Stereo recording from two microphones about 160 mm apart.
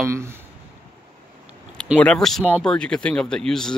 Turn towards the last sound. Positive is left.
turn(degrees=5)  # may be behind; listen again after turning